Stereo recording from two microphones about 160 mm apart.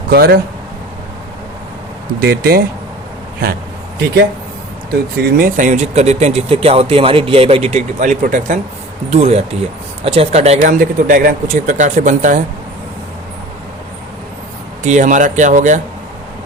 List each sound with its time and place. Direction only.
0.1 s speech: 75° right (ahead or behind)
2.2 s speech: 70° right (ahead or behind)
4.9 s speech: 65° right (ahead or behind)
9.0 s speech: 40° right (ahead or behind)
10.6 s speech: 60° right (ahead or behind)
14.8 s speech: 50° right (ahead or behind)